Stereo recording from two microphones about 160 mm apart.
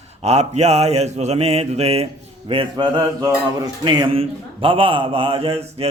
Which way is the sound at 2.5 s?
30° right (ahead or behind).